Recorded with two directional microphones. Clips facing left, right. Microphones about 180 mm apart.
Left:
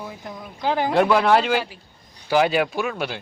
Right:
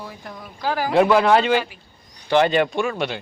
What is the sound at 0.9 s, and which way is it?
Speech, centre (ahead or behind).